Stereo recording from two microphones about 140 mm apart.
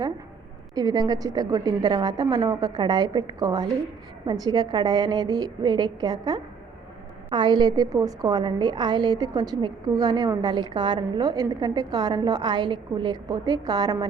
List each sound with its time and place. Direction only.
0.8 s a woman's voice: 30° right (ahead or behind)